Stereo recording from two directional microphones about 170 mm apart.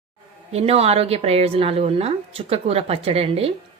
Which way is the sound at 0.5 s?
35° right (ahead or behind).